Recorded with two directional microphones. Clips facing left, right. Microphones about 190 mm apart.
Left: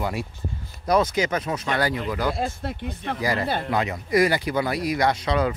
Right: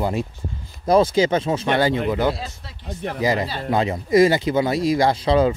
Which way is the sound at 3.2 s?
20° right (ahead or behind).